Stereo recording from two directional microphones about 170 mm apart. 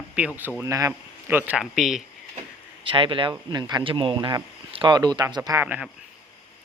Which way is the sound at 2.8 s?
30° right (ahead or behind).